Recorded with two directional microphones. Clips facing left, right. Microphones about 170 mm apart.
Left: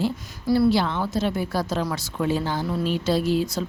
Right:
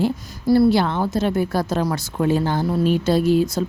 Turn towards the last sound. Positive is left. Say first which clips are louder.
# right 5 dB
turn(degrees=-45)  # may be behind; listen again after turning